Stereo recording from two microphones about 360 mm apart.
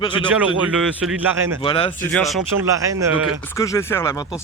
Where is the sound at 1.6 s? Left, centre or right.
Centre.